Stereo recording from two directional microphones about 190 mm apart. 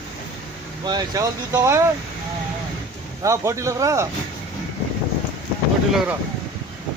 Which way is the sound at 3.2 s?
15° right (ahead or behind).